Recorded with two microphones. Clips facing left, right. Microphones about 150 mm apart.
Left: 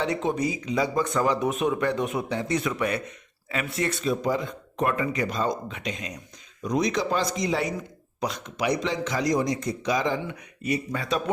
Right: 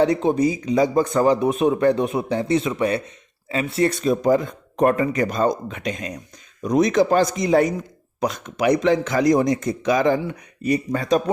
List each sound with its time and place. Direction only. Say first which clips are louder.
0.0 s speech: right 8 dB; 35° right (ahead or behind); by 10.2 s 55° right (ahead or behind)
10.2 s speech: right 6 dB; 40° right (ahead or behind)